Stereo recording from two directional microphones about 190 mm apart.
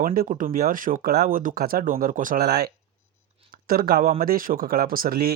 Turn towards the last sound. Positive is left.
turn(degrees=-50)  # may be behind; listen again after turning